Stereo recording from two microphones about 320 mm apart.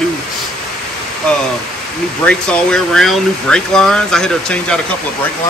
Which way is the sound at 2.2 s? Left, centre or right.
Centre.